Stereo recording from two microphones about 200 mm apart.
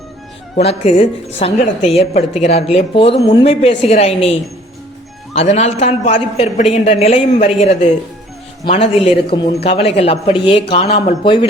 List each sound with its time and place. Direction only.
0.5 s a woman's voice: 30° left (ahead or behind)